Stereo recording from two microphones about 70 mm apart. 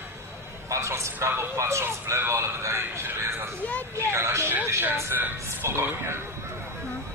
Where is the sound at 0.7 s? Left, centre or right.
Right.